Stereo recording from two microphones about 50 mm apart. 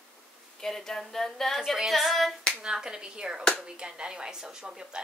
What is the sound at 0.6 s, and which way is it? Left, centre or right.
A woman's voice, centre.